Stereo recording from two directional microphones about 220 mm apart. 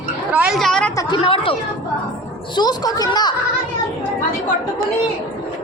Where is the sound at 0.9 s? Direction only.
25° left (ahead or behind).